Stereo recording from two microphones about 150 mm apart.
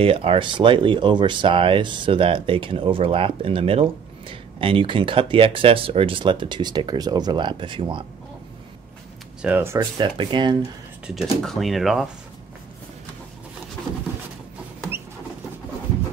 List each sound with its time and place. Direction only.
0.0 s speech: 40° right (ahead or behind)
9.4 s speech: 10° right (ahead or behind)
9.8 s speech: 35° right (ahead or behind)
11.4 s speech: centre (ahead or behind)